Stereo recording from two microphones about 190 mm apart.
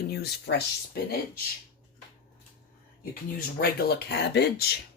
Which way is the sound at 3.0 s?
50° left (ahead or behind).